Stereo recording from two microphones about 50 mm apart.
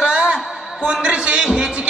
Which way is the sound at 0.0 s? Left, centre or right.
Centre.